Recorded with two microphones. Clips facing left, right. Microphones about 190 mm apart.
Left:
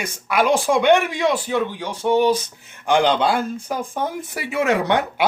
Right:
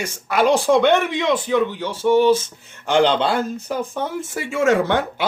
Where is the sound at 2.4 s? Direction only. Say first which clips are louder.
Right 1 dB; 55° left (ahead or behind).